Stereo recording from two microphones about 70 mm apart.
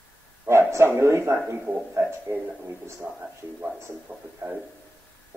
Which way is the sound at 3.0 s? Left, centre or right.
Centre.